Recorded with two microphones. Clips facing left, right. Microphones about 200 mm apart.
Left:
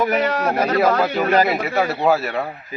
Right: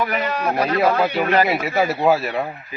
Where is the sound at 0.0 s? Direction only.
45° left (ahead or behind).